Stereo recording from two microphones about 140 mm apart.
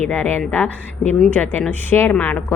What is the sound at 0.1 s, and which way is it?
A woman's voice, 10° left (ahead or behind).